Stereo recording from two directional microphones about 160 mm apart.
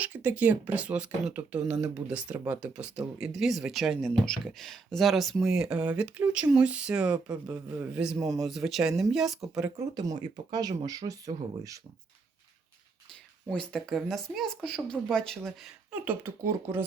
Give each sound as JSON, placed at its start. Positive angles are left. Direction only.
{"t": 0.0, "sound": "speech", "side_deg": -10}
{"t": 9.9, "sound": "speech", "side_deg": -25}
{"t": 13.5, "sound": "speech", "side_deg": 5}
{"t": 16.0, "sound": "speech", "side_deg": -15}